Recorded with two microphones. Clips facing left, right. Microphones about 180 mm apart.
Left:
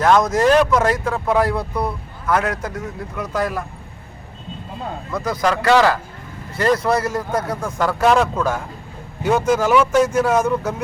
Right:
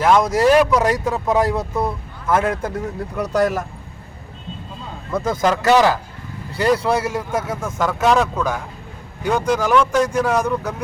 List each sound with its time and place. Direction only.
0.0 s speech: 10° right (ahead or behind); by 3.7 s 40° right (ahead or behind)
5.1 s speech: 25° right (ahead or behind); by 10.8 s 5° left (ahead or behind)